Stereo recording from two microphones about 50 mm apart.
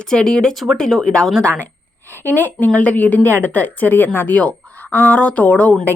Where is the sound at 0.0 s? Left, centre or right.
Centre.